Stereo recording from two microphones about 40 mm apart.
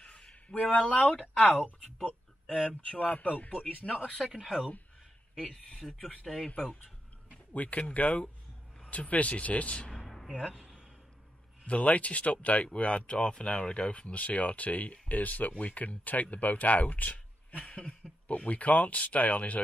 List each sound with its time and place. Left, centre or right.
0.0 s a sound: left
1.2 s speech: left
3.9 s speech: centre
4.2 s speech: centre
5.4 s speech: centre
7.5 s speech: left
9.8 s a sound: centre
11.6 s speech: left